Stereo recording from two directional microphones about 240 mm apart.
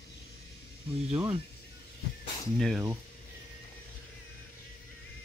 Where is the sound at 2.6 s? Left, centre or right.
Centre.